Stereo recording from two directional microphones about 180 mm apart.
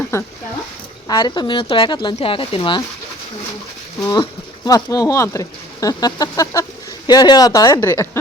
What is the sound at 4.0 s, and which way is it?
Speech, 20° left (ahead or behind).